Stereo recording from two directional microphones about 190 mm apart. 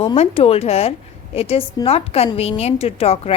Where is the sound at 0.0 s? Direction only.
30° left (ahead or behind).